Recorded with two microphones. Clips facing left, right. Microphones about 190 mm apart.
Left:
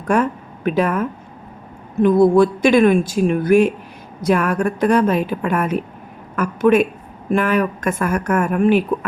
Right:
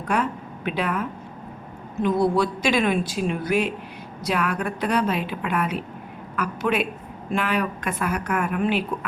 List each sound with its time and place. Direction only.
0.1 s a woman's voice: 45° left (ahead or behind)